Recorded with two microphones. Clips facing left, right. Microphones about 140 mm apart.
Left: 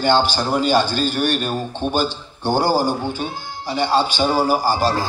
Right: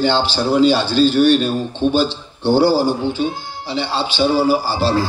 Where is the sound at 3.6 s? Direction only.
45° left (ahead or behind).